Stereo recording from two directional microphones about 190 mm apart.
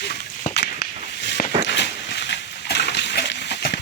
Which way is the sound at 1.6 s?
65° left (ahead or behind).